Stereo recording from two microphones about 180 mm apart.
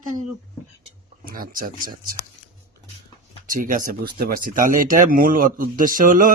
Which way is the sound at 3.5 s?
50° right (ahead or behind).